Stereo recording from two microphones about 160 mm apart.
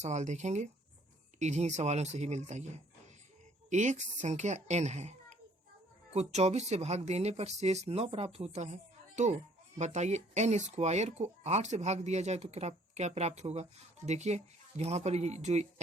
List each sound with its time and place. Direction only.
0.0 s speech: 45° right (ahead or behind)